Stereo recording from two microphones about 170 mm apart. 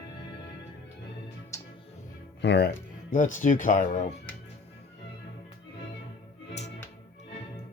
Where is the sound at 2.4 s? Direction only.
80° left.